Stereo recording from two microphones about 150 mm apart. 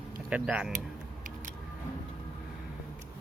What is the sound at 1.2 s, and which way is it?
Vehicle, 60° right (ahead or behind).